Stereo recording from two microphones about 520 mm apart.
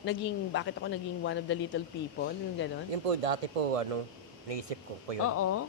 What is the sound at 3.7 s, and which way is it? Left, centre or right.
Speech, right.